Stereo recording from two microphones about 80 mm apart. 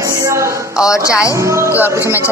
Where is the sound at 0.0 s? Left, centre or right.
Right.